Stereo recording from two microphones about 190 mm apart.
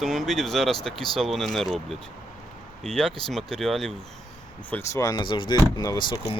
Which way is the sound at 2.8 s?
5° left (ahead or behind).